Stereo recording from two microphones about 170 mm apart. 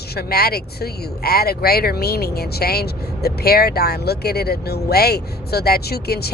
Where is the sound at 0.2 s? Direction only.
65° left (ahead or behind).